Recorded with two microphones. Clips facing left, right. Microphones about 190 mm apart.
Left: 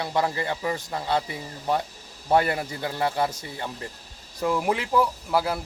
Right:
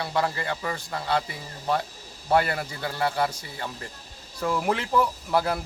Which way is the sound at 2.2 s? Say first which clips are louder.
Left 1 dB; 20° left (ahead or behind).